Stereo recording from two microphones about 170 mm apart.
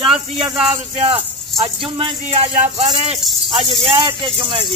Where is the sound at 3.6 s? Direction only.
30° right (ahead or behind).